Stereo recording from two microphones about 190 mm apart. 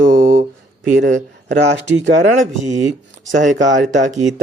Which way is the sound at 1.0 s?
65° right (ahead or behind).